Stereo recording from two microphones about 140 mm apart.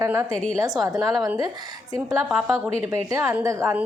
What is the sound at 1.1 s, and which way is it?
Speech, centre (ahead or behind).